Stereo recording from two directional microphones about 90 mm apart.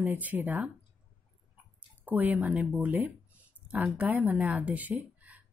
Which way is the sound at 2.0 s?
20° right (ahead or behind).